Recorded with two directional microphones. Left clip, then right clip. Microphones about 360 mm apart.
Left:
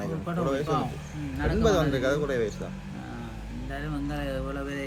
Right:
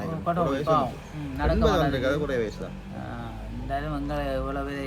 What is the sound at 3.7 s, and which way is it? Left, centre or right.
Speech, centre.